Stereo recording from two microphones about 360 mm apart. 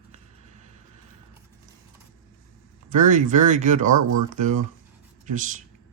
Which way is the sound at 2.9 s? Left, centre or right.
Right.